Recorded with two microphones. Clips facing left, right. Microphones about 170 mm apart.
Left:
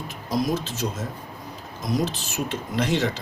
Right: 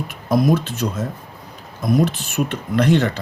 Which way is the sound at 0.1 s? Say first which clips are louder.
Right 7 dB; 55° right (ahead or behind).